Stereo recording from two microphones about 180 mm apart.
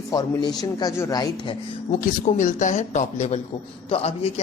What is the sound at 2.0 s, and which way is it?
A man's voice, 45° left (ahead or behind).